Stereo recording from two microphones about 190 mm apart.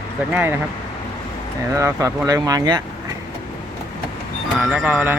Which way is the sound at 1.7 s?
15° right (ahead or behind).